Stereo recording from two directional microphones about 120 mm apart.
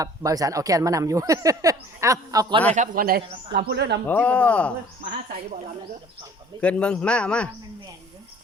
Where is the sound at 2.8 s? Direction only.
90° right.